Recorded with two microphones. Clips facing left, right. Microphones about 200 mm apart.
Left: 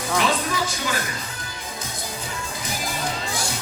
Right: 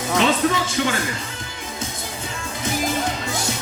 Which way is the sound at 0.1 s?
25° right (ahead or behind).